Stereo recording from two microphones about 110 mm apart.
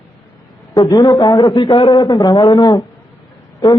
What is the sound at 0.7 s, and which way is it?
A man's voice, 35° left (ahead or behind).